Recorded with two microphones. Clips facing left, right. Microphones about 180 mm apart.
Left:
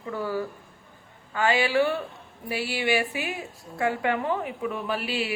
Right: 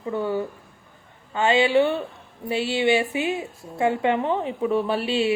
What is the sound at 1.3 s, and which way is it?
A woman's voice, 25° right (ahead or behind).